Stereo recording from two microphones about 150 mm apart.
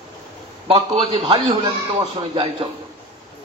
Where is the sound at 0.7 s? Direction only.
40° right (ahead or behind).